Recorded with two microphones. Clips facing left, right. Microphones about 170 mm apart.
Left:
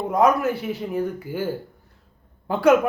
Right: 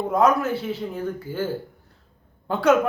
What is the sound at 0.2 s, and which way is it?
A woman's voice, 15° left (ahead or behind).